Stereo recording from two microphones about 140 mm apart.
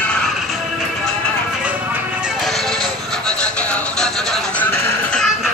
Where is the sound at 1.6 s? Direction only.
10° right (ahead or behind).